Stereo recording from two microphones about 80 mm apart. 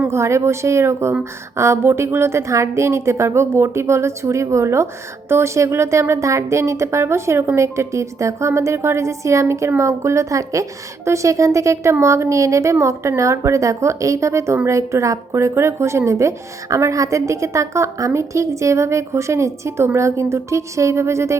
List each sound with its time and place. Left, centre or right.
0.1 s a woman's voice: right